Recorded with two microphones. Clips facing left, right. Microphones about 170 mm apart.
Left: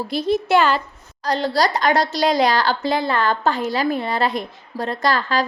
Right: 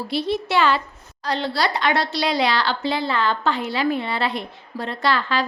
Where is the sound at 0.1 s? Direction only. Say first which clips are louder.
Left 5 dB; 45° left (ahead or behind).